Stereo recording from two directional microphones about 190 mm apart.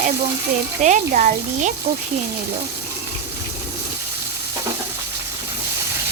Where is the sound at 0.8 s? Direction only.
40° right (ahead or behind).